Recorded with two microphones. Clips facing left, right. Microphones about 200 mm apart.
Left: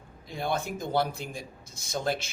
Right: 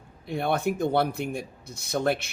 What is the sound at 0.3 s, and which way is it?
Speech, 60° right (ahead or behind).